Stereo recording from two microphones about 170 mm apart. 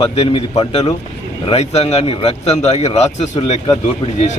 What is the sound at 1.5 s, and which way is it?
A man's voice, 35° left (ahead or behind).